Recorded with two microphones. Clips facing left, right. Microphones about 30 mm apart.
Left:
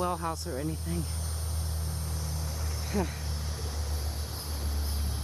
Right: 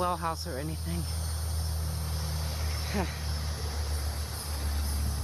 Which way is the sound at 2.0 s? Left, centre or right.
Right.